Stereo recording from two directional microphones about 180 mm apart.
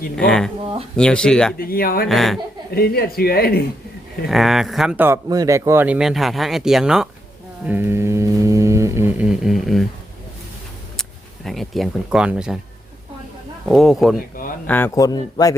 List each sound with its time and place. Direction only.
0.2 s speech: 5° left (ahead or behind)
0.6 s speech: 30° right (ahead or behind)
0.9 s speech: 5° left (ahead or behind)
1.5 s speech: 55° left (ahead or behind)
2.0 s speech: centre (ahead or behind)
2.7 s speech: 60° left (ahead or behind)
4.3 s speech: centre (ahead or behind)
7.6 s mantra: 10° right (ahead or behind)
11.4 s speech: centre (ahead or behind)
13.7 s speech: centre (ahead or behind)
14.7 s a man's voice: 15° left (ahead or behind)